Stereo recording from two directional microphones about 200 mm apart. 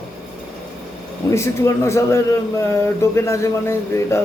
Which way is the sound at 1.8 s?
15° left (ahead or behind).